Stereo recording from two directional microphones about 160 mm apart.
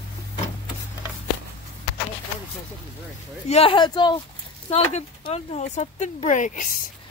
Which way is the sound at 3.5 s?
35° left (ahead or behind).